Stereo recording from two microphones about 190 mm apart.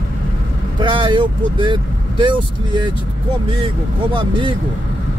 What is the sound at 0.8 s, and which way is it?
A man's voice, 25° right (ahead or behind).